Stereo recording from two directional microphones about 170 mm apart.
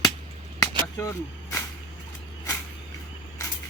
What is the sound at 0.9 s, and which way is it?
Speech, 15° left (ahead or behind).